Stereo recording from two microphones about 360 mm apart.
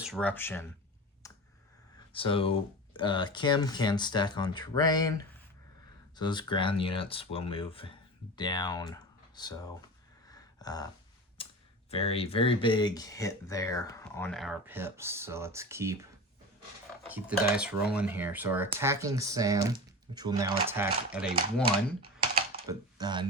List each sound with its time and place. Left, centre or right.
0.0 s speech: centre
1.2 s clicking: centre
2.1 s speech: centre
10.2 s a sound: centre
11.9 s speech: centre
17.1 s speech: centre
22.0 s typing: right
22.6 s speech: centre